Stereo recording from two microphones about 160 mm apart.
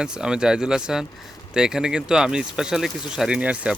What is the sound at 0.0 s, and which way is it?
Speech, 5° right (ahead or behind).